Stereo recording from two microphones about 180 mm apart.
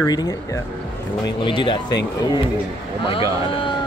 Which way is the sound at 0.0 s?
20° left (ahead or behind).